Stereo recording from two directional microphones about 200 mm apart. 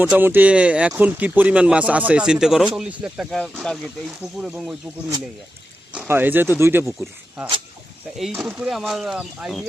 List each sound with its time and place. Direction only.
0.0 s speech: 10° right (ahead or behind)
5.9 s speech: 10° right (ahead or behind)
8.2 s speech: 5° right (ahead or behind)